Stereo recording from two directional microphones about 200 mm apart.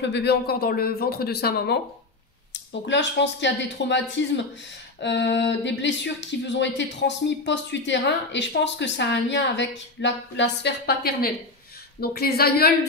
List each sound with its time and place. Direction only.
0.0 s speech: 55° left (ahead or behind)
2.9 s speech: 60° left (ahead or behind)